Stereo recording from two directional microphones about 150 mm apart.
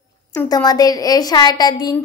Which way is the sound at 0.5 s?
25° left (ahead or behind).